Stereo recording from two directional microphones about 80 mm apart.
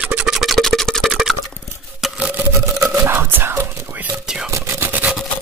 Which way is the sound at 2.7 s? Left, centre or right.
Right.